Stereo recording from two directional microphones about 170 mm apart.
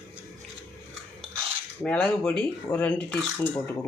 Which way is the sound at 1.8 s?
5° left (ahead or behind).